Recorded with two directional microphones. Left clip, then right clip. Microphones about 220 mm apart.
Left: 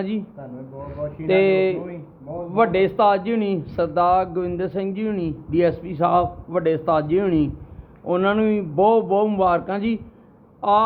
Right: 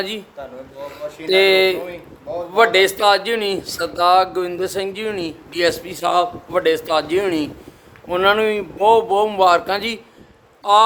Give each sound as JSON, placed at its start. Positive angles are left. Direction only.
{"t": 1.3, "sound": "speech", "side_deg": -35}